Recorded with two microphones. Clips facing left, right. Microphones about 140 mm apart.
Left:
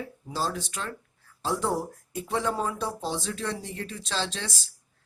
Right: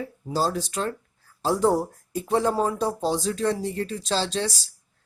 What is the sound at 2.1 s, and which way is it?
Speech, 35° right (ahead or behind).